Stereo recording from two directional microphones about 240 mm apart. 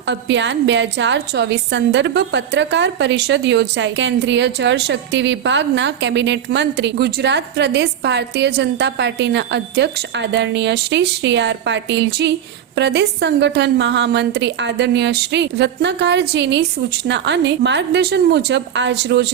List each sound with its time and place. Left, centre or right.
0.1 s a woman's voice: right